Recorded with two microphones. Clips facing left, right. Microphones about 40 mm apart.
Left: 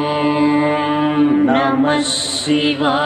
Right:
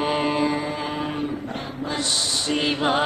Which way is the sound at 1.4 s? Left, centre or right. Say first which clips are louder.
Left 18 dB; left.